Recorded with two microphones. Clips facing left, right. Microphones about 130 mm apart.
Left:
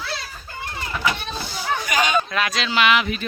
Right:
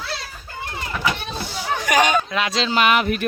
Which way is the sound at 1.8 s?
70° right (ahead or behind).